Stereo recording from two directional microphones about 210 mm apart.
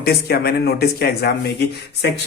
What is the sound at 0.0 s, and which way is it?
Speech, 45° left (ahead or behind).